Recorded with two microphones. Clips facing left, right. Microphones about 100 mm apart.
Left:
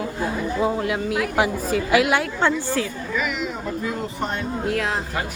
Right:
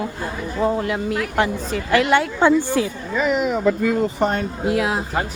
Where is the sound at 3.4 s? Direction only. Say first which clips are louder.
Right 8 dB; 80° right.